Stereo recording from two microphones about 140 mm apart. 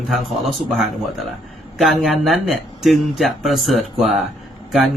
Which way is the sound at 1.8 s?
Centre (ahead or behind).